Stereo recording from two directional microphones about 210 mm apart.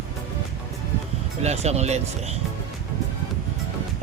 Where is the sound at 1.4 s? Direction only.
30° right (ahead or behind).